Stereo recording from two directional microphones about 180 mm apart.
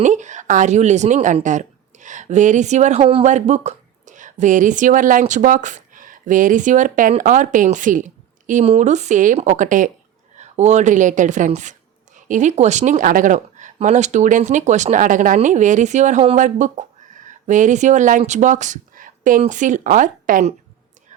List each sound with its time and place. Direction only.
0.0 s a woman's voice: 45° right (ahead or behind)